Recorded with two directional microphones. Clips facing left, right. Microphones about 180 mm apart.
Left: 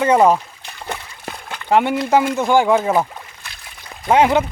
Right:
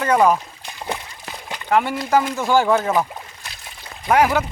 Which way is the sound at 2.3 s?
15° left (ahead or behind).